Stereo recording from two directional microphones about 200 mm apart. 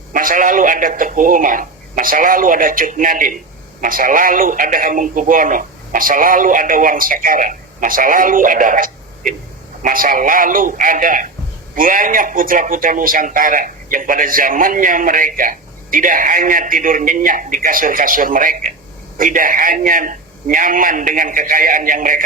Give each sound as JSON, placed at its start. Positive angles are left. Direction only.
{"t": 0.1, "sound": "a man's voice", "side_deg": -45}